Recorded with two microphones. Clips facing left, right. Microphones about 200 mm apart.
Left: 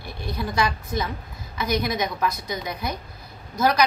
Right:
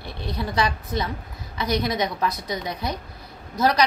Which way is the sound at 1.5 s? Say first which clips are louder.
Right 1 dB; 30° right (ahead or behind).